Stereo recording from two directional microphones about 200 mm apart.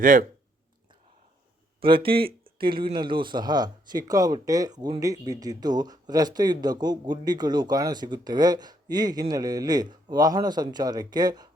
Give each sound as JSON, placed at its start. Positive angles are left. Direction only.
{"t": 0.0, "sound": "speech", "side_deg": -40}
{"t": 1.8, "sound": "speech", "side_deg": -25}